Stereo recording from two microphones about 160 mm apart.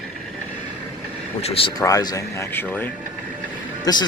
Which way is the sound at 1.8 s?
25° left (ahead or behind).